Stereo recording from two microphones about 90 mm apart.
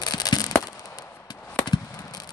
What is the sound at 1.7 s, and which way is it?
Chop, 55° left (ahead or behind).